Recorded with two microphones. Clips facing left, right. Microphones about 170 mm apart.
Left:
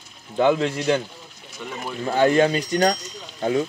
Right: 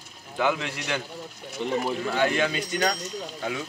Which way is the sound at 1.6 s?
25° right (ahead or behind).